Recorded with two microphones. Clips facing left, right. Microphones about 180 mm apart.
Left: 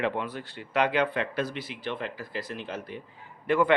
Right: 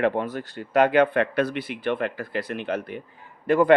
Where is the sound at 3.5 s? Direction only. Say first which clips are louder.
Right 5 dB; 40° right (ahead or behind).